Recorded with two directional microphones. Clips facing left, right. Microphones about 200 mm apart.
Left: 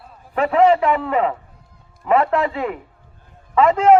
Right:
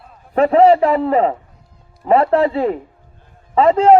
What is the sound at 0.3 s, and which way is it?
A man's voice, 35° right (ahead or behind).